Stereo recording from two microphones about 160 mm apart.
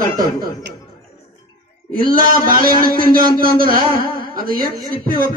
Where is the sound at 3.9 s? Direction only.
65° right (ahead or behind).